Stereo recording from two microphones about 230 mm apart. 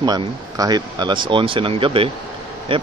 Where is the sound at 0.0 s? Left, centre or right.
Centre.